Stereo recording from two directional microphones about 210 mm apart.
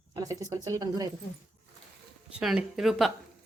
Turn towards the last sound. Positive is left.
turn(degrees=0)  # may be behind; listen again after turning